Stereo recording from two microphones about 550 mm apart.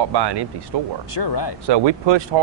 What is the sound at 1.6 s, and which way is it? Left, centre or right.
Speech, right.